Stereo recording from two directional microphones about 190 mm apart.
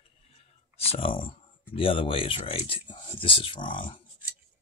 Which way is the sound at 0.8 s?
30° left (ahead or behind).